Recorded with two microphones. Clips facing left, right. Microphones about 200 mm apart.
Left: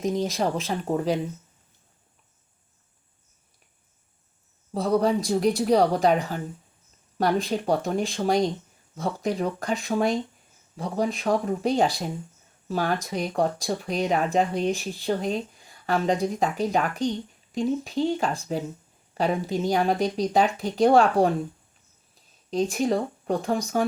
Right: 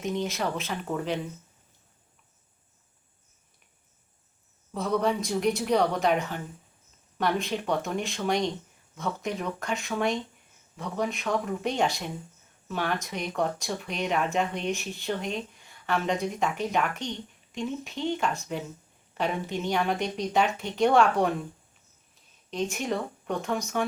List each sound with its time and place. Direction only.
0.0 s speech: 35° left (ahead or behind)
4.7 s speech: 35° left (ahead or behind)
22.4 s speech: 35° left (ahead or behind)